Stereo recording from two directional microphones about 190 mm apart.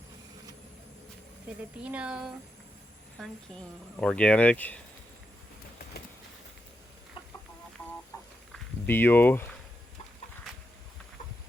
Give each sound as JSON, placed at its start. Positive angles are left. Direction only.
{"t": 1.8, "sound": "speech", "side_deg": -5}
{"t": 8.1, "sound": "a sound", "side_deg": 20}
{"t": 8.5, "sound": "speech", "side_deg": 10}